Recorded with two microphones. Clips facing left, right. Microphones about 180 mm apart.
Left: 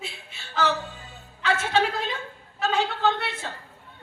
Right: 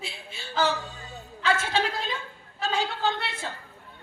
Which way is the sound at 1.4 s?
65° left (ahead or behind).